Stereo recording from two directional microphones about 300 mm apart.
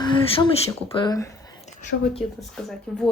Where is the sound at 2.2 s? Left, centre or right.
Centre.